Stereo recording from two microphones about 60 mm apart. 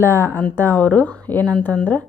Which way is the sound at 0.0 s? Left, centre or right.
Left.